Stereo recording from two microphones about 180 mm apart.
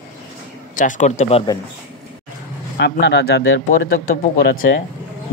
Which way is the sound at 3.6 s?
50° left (ahead or behind).